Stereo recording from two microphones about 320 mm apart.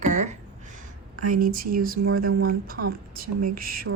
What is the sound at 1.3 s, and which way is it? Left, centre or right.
Speech, right.